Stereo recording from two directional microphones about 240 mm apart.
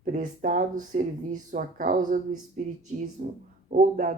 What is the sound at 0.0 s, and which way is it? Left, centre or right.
Speech, right.